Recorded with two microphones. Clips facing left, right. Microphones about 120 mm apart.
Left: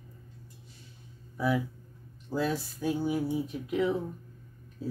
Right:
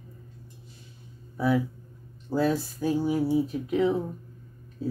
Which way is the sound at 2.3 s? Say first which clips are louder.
Right 5 dB; 30° right (ahead or behind).